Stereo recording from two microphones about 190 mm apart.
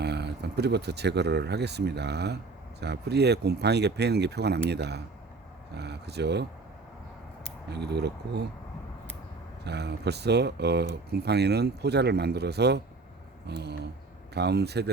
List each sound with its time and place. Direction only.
0.0 s speech: 60° right (ahead or behind)
7.7 s speech: 60° right (ahead or behind)
9.6 s speech: 60° right (ahead or behind)